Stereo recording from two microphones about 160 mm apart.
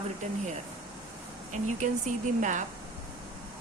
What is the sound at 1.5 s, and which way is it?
A woman's voice, 50° right (ahead or behind).